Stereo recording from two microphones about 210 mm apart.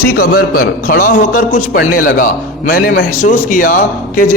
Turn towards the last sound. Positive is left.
turn(degrees=40)  # may be behind; listen again after turning